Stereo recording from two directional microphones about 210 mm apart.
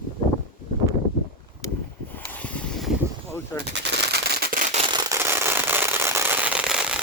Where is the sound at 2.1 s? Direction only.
10° left (ahead or behind).